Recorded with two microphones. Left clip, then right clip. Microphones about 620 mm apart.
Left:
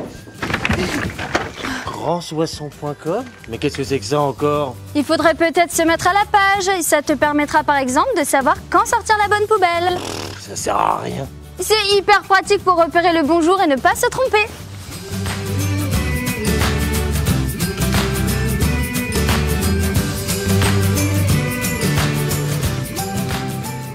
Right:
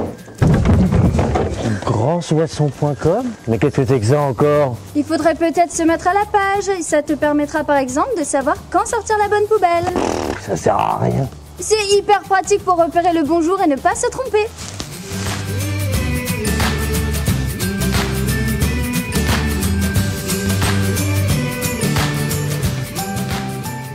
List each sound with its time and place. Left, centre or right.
1.9 s speech: right
5.1 s a woman's voice: left
9.9 s speech: right
11.7 s speech: left
16.4 s music: centre